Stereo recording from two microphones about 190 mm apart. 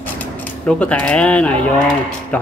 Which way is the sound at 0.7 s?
5° left (ahead or behind).